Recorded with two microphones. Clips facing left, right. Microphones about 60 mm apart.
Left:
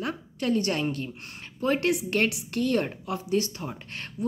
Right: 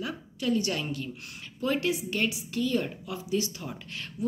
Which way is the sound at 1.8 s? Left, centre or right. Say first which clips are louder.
Left 4 dB; left.